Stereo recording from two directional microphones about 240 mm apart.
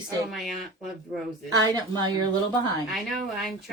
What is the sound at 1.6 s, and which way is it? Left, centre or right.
Speech, centre.